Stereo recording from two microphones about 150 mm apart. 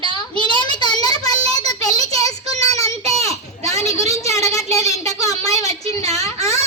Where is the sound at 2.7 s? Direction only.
20° left (ahead or behind).